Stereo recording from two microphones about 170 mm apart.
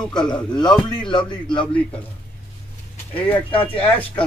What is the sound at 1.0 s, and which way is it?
Speech, 30° left (ahead or behind).